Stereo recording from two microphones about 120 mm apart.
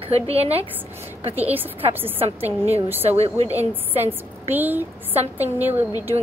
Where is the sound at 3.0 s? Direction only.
60° right (ahead or behind).